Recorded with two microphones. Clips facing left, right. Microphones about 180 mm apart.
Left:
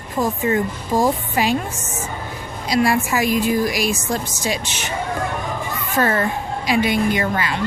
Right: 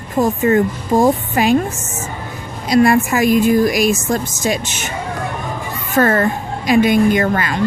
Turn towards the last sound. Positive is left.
turn(degrees=-50)  # may be behind; listen again after turning